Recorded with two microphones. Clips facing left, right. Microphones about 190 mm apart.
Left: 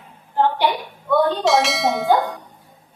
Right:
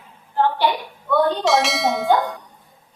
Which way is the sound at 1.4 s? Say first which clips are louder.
Left 1 dB; centre (ahead or behind).